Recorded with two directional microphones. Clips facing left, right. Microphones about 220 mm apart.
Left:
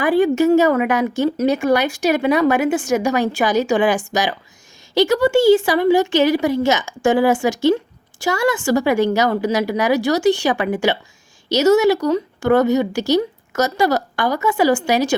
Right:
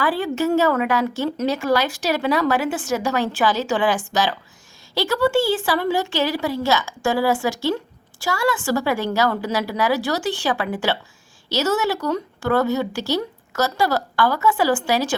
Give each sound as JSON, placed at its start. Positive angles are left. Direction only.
{"t": 0.0, "sound": "a woman's voice", "side_deg": 15}